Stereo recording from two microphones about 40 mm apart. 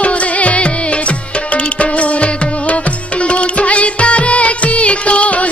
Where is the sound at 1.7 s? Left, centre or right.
Left.